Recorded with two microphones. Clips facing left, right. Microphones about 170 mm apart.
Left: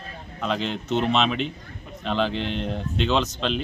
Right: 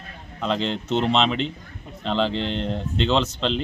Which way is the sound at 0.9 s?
25° right (ahead or behind).